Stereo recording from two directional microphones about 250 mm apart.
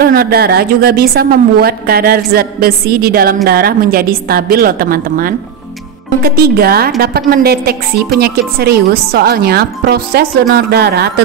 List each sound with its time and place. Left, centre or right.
0.0 s a woman's voice: right